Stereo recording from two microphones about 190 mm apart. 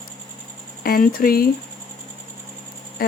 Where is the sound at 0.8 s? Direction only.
50° left (ahead or behind).